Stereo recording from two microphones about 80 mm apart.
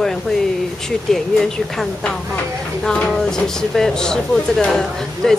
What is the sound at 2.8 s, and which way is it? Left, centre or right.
Speech, centre.